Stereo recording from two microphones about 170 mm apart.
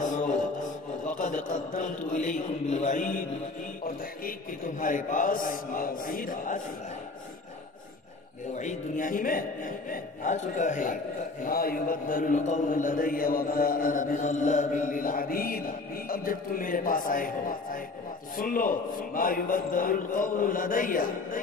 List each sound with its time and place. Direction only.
0.0 s music: 45° left (ahead or behind)
1.0 s a man's voice: 45° left (ahead or behind)
8.5 s a man's voice: 50° left (ahead or behind)